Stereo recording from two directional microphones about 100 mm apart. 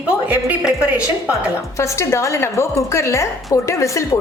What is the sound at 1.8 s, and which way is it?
A woman's voice, 30° left (ahead or behind).